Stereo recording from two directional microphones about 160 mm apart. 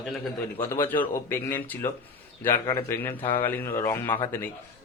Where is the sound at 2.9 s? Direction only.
15° left (ahead or behind).